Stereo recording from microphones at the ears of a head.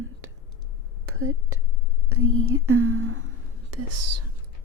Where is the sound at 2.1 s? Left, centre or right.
Right.